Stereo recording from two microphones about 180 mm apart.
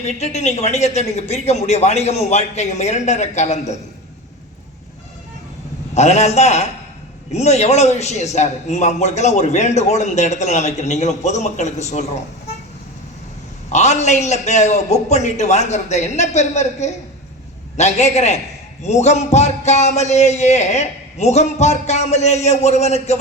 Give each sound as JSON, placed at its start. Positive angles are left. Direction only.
{"t": 0.0, "sound": "a man's voice", "side_deg": 40}
{"t": 5.9, "sound": "a man's voice", "side_deg": 40}
{"t": 13.7, "sound": "a man's voice", "side_deg": 40}